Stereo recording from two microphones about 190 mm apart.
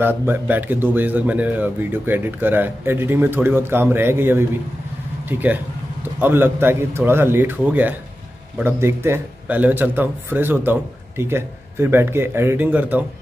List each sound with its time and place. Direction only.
0.0 s speech: 10° right (ahead or behind)